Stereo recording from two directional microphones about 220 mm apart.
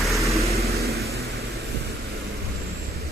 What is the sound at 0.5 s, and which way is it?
Vehicle, 30° right (ahead or behind).